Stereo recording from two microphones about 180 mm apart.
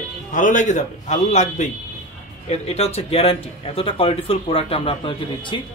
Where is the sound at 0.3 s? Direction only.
45° left (ahead or behind).